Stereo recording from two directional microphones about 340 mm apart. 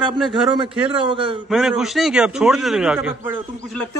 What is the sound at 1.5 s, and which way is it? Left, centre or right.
A man's voice, centre.